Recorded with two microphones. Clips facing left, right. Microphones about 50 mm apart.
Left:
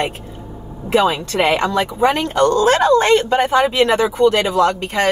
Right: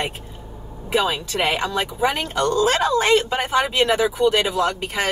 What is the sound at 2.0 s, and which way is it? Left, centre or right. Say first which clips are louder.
Speech: left 7 dB; centre.